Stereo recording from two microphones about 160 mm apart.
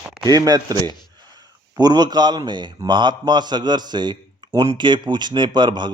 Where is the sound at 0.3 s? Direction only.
25° right (ahead or behind).